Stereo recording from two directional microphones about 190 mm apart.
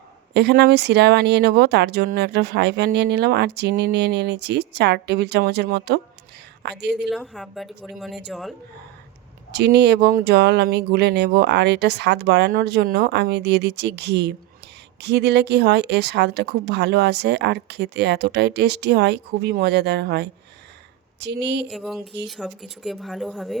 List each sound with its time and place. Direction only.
0.3 s speech: 60° right (ahead or behind)
7.1 s speech: centre (ahead or behind)
9.5 s speech: 60° right (ahead or behind)
21.7 s speech: centre (ahead or behind)